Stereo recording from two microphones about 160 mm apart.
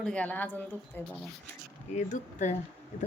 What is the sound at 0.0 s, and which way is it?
Speech, 5° left (ahead or behind).